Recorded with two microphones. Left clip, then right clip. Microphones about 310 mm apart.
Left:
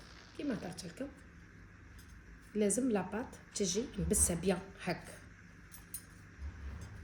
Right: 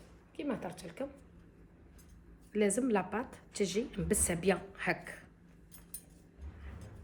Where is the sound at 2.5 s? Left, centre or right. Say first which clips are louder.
Right 3 dB; centre.